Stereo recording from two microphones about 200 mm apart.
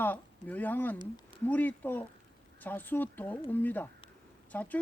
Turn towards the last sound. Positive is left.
turn(degrees=10)  # may be behind; listen again after turning